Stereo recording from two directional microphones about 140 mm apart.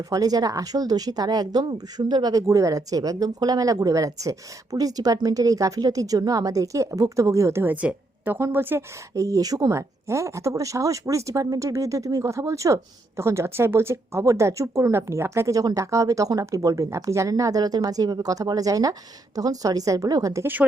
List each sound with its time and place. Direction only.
0.0 s speech: 25° right (ahead or behind)